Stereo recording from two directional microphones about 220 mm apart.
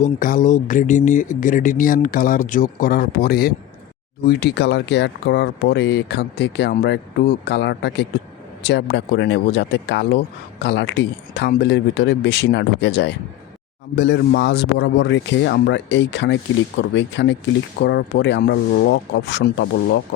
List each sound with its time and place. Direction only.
0.0 s speech: 40° left (ahead or behind); by 20.0 s 55° left (ahead or behind)